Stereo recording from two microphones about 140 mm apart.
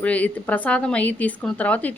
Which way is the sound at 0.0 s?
10° left (ahead or behind).